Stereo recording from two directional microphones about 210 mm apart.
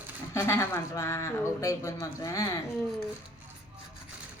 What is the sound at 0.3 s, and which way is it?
Speech, 15° left (ahead or behind).